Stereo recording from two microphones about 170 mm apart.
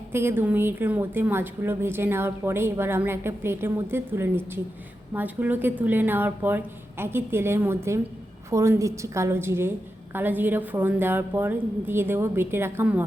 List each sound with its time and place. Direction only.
0.1 s a woman's voice: 15° right (ahead or behind)